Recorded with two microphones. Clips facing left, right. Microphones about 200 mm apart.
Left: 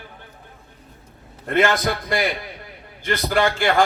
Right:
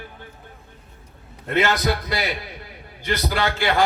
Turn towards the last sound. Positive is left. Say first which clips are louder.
# left 3 dB
turn(degrees=50)  # may be behind; listen again after turning